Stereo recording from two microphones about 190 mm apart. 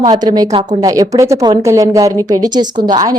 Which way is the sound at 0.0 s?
20° right (ahead or behind).